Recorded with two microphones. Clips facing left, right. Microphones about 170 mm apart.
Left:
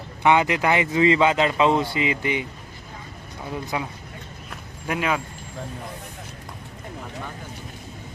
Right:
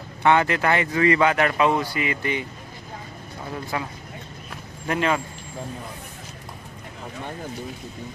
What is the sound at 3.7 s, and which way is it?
Speech, 15° left (ahead or behind).